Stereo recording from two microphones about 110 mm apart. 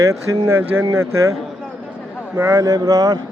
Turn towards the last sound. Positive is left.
turn(degrees=-35)  # may be behind; listen again after turning